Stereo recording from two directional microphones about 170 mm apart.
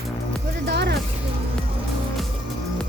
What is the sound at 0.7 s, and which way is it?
Music, 80° right.